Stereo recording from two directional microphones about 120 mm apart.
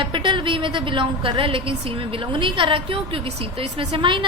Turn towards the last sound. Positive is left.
turn(degrees=-45)  # may be behind; listen again after turning